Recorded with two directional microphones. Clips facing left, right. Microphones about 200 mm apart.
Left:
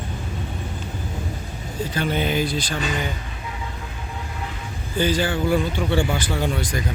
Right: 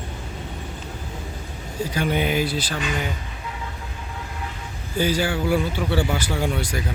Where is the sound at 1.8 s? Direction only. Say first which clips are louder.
Right 1 dB; 10° right (ahead or behind).